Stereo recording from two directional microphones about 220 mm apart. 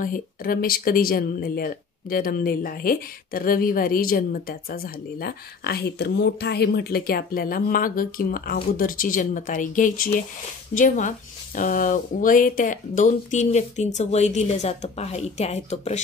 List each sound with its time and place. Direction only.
0.0 s speech: 40° left (ahead or behind)